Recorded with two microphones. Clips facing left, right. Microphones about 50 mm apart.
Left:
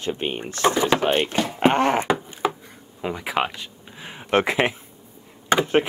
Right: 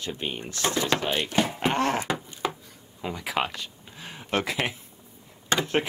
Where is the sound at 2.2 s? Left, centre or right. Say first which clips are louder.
Left 6 dB; left.